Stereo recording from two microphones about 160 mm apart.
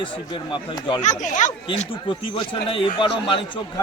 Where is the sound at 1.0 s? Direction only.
50° left (ahead or behind).